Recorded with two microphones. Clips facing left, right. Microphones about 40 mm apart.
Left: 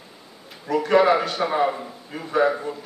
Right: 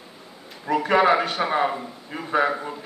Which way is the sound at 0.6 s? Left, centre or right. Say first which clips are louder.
Left 1 dB; right.